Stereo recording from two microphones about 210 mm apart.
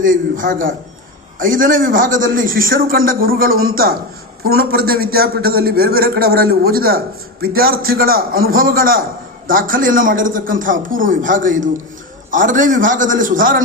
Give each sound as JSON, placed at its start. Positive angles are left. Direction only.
{"t": 0.0, "sound": "a man's voice", "side_deg": -40}